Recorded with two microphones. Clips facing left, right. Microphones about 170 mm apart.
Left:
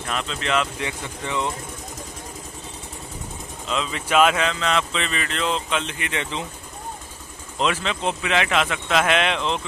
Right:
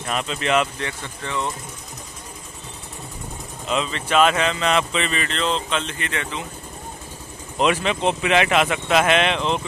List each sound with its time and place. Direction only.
0.1 s speech: 10° right (ahead or behind)
0.7 s speech: 15° left (ahead or behind)
3.6 s speech: 10° right (ahead or behind)
3.9 s speech: 10° left (ahead or behind)
4.5 s speech: 15° right (ahead or behind); by 6.2 s 15° left (ahead or behind)
7.5 s speech: 15° right (ahead or behind)